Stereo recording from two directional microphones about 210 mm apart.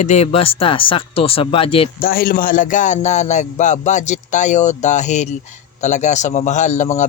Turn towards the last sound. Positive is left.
turn(degrees=35)  # may be behind; listen again after turning